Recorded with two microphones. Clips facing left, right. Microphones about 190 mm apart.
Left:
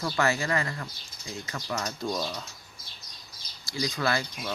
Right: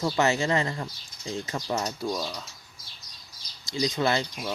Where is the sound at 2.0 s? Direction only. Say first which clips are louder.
Right 1 dB; 5° right (ahead or behind).